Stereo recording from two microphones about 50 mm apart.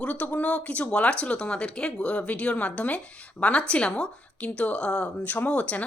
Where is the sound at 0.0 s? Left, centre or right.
Left.